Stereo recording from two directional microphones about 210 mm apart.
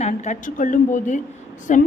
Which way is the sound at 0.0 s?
35° left (ahead or behind).